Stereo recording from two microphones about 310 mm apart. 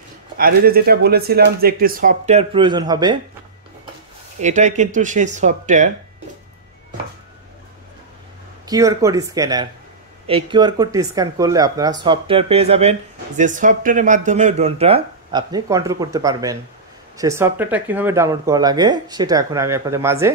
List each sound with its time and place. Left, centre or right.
0.4 s speech: right; by 3.2 s centre
4.4 s speech: right
8.6 s speech: centre